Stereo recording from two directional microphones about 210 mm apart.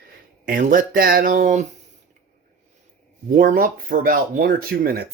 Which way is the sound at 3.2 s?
40° right (ahead or behind).